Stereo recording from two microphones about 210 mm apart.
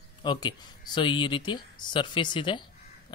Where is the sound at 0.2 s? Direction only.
20° left (ahead or behind).